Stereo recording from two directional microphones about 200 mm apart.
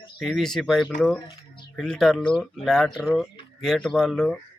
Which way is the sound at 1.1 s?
15° left (ahead or behind).